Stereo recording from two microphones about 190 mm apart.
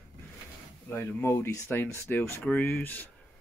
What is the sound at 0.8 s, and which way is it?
Speech, 10° left (ahead or behind).